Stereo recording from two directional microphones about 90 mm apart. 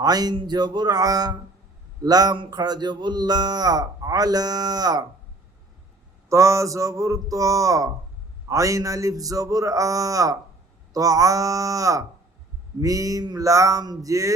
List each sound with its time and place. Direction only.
0.0 s speech: 45° right (ahead or behind)
6.2 s a man's voice: 35° right (ahead or behind)